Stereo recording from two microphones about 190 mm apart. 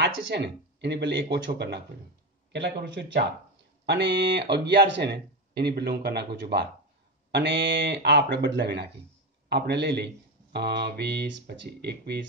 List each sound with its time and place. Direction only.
0.0 s speech: 65° right (ahead or behind)